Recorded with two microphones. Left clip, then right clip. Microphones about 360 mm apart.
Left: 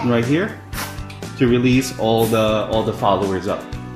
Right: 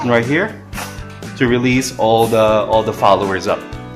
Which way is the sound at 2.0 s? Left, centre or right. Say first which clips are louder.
Right 6 dB; right.